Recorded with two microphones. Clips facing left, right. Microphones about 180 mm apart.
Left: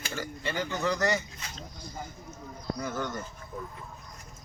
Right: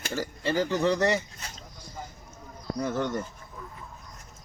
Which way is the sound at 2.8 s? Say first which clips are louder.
Right 6 dB; 35° right (ahead or behind).